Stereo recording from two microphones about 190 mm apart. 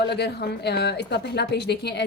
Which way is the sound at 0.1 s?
60° left (ahead or behind).